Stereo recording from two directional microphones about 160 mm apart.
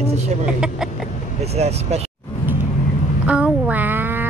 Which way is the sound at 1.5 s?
40° right (ahead or behind).